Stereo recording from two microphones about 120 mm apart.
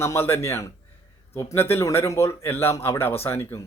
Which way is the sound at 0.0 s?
20° left (ahead or behind).